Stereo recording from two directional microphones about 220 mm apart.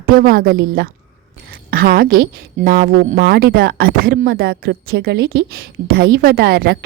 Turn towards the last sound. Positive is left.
turn(degrees=-45)  # may be behind; listen again after turning